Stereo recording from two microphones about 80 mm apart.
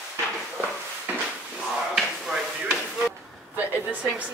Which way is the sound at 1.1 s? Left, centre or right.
Right.